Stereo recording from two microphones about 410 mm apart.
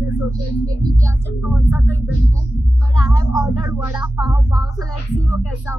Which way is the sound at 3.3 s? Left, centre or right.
Centre.